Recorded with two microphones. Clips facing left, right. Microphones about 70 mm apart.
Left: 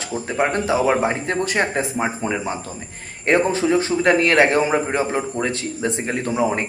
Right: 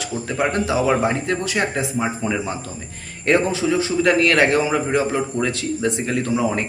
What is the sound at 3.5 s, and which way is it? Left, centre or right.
A man's voice, left.